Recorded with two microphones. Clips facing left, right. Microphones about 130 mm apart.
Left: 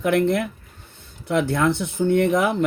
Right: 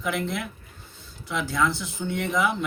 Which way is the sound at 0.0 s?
60° left (ahead or behind).